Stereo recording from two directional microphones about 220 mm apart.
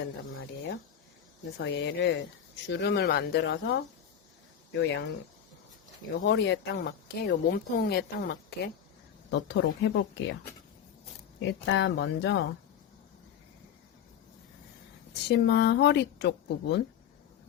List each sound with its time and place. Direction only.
0.0 s speech: 55° left (ahead or behind)
4.8 s speech: 55° left (ahead or behind)
6.1 s speech: 55° left (ahead or behind)
11.3 s speech: 55° left (ahead or behind)
15.3 s speech: 50° left (ahead or behind)